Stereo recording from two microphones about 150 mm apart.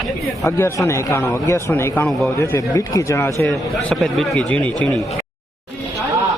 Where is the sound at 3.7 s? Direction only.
Centre (ahead or behind).